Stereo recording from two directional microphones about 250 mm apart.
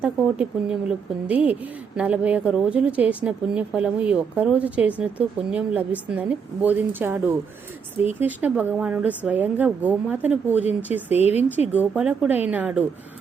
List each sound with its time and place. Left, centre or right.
0.0 s speech: centre
11.1 s speech: left
11.7 s speech: centre